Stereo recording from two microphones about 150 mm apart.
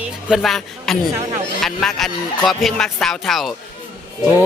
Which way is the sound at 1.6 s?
Centre (ahead or behind).